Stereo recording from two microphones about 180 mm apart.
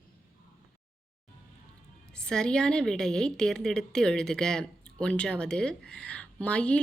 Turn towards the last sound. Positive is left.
turn(degrees=5)  # may be behind; listen again after turning